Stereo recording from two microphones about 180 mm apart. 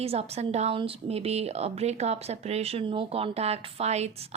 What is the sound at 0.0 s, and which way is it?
A woman's voice, 35° right (ahead or behind).